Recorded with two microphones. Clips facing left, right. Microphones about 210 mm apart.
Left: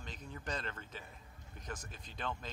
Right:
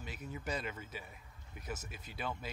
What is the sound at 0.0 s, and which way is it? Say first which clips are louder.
A man's voice: right 3 dB; 10° right (ahead or behind).